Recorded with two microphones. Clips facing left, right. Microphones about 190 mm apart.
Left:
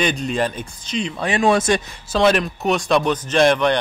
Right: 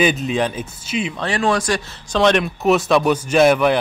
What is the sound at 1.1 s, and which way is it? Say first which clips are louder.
Speech: left 3 dB; 15° left (ahead or behind).